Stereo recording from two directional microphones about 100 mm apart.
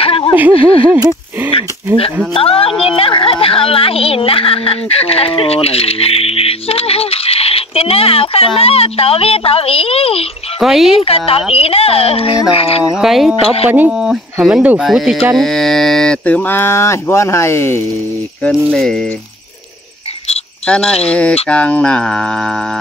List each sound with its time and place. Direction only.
0.0 s a sound: 65° left (ahead or behind)
0.5 s speech: 40° right (ahead or behind)
2.3 s speech: 70° left (ahead or behind)
10.6 s speech: centre (ahead or behind)
11.0 s speech: 75° left (ahead or behind)
12.9 s speech: 5° right (ahead or behind)
13.7 s speech: 15° right (ahead or behind)
13.9 s speech: 5° right (ahead or behind)
15.3 s mantra: 5° left (ahead or behind); by 17.8 s 25° left (ahead or behind)
18.5 s speech: 5° left (ahead or behind)
20.6 s speech: 10° left (ahead or behind)
21.1 s music: 10° left (ahead or behind)